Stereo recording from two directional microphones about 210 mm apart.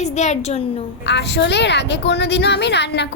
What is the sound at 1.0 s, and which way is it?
A woman's voice, 55° left (ahead or behind).